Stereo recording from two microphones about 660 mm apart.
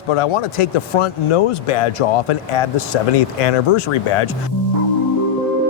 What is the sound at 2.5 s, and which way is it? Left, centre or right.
Speech, left.